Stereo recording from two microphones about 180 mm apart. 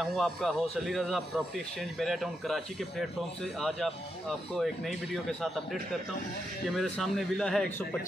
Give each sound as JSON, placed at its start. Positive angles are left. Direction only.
{"t": 0.0, "sound": "speech", "side_deg": 0}
{"t": 6.8, "sound": "speech", "side_deg": 0}